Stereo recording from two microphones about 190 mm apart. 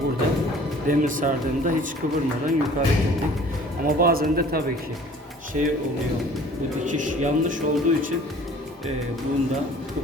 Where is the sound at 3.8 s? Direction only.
50° right (ahead or behind).